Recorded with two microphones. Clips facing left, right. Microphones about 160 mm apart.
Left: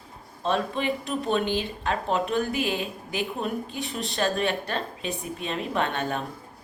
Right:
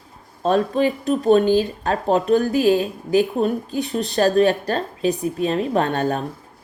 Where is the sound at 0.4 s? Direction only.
40° right (ahead or behind).